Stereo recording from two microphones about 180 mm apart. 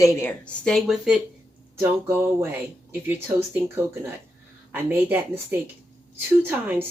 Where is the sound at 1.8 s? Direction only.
15° right (ahead or behind).